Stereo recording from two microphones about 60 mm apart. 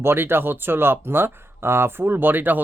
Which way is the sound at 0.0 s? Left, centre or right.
Right.